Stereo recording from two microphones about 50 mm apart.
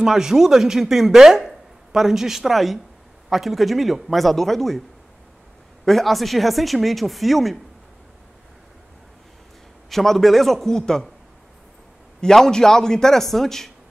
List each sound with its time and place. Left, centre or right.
0.0 s speech: centre
5.9 s speech: centre
9.8 s speech: centre
12.2 s a man's voice: centre